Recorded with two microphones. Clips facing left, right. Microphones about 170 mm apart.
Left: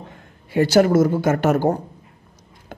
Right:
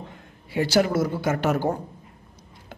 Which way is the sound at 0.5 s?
50° left (ahead or behind).